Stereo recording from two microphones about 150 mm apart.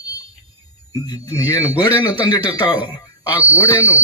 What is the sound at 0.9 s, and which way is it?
Speech, 25° left (ahead or behind).